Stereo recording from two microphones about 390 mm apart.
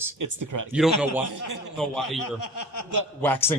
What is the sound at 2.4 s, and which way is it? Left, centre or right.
Speech, left.